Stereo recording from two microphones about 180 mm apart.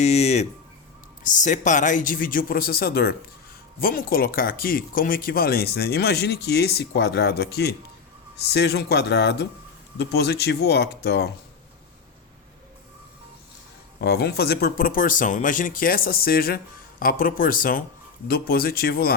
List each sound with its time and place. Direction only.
0.0 s speech: 35° left (ahead or behind); by 11.3 s 65° left (ahead or behind)
14.0 s speech: 65° left (ahead or behind)